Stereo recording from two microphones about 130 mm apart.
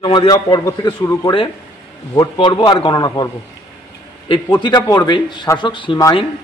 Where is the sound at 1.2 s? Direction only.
40° left (ahead or behind).